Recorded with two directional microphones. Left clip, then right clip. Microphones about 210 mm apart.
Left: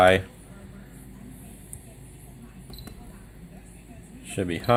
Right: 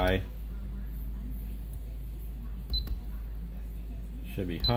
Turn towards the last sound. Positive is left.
turn(degrees=45)  # may be behind; listen again after turning